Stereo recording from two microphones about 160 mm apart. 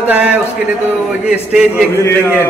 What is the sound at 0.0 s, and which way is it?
A man's voice, 10° right (ahead or behind).